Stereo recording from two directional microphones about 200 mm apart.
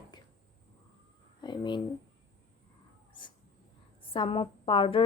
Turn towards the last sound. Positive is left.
turn(degrees=25)  # may be behind; listen again after turning